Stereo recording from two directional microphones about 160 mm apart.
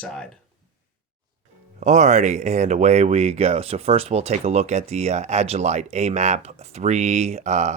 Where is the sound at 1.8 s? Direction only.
50° right (ahead or behind).